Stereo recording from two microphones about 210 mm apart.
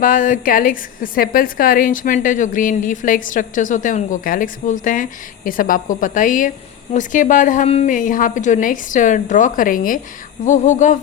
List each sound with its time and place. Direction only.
0.0 s a woman's voice: 40° left (ahead or behind)